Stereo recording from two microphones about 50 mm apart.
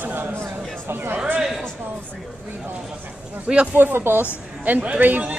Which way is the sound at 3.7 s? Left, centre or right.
Right.